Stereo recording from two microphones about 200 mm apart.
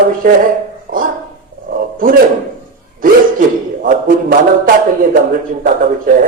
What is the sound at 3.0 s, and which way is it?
A man's voice, 45° right (ahead or behind).